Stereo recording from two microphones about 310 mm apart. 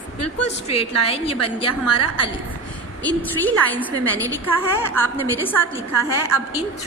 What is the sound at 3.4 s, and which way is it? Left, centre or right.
A woman's voice, centre.